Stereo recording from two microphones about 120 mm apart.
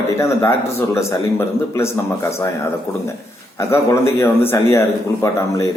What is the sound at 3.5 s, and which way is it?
A man's voice, 20° left (ahead or behind).